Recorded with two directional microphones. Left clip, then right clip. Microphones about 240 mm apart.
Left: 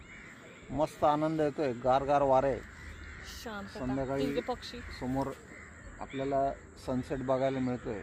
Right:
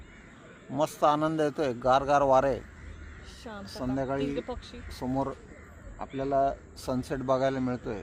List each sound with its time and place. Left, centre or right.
0.7 s a man's voice: centre
3.8 s a man's voice: centre
4.2 s speech: left
4.9 s a man's voice: centre